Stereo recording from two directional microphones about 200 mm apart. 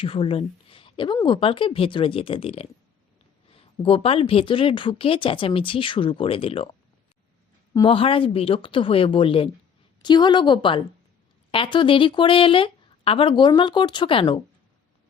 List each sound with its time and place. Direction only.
0.0 s a woman's voice: 25° left (ahead or behind)